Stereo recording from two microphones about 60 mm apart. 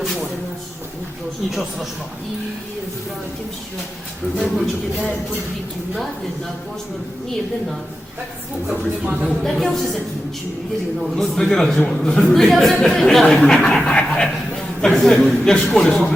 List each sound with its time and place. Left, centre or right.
1.5 s speech: centre
4.4 s speech: centre
8.6 s speech: centre
9.4 s speech: centre
11.0 s a man's voice: centre